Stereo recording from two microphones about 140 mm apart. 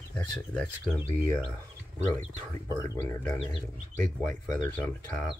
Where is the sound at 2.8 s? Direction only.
20° left (ahead or behind).